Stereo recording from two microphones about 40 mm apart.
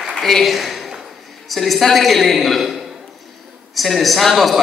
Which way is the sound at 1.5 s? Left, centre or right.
Centre.